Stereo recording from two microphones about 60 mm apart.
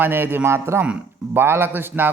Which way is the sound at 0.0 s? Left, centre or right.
Right.